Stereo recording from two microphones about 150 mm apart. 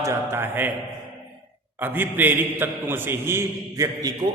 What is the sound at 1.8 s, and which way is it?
A man's voice, 15° right (ahead or behind).